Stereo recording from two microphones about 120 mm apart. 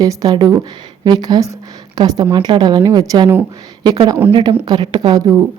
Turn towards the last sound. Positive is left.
turn(degrees=-35)  # may be behind; listen again after turning